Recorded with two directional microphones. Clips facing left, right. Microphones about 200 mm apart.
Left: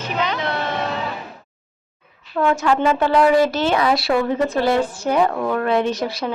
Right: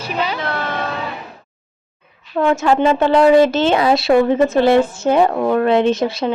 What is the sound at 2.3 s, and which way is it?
Speech, 25° right (ahead or behind).